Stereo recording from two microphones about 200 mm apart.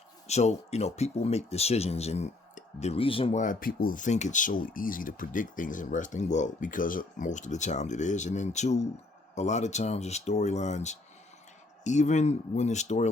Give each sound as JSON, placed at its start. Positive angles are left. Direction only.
{"t": 0.3, "sound": "speech", "side_deg": 35}